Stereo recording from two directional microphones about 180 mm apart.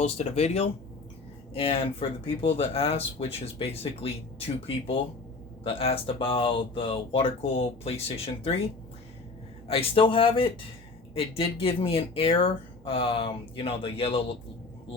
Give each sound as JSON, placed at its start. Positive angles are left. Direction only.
{"t": 0.0, "sound": "speech", "side_deg": 35}
{"t": 9.6, "sound": "speech", "side_deg": 30}